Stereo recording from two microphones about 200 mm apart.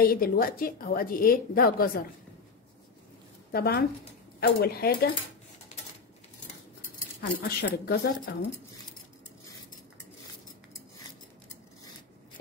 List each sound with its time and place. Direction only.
0.0 s a woman's voice: 45° left (ahead or behind)
3.5 s a woman's voice: 50° left (ahead or behind)
7.2 s a woman's voice: 50° left (ahead or behind)